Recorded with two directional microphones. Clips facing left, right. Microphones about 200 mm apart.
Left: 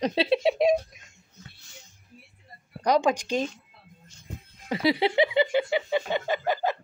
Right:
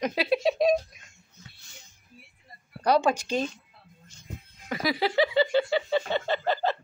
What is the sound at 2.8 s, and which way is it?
Speech, 15° left (ahead or behind).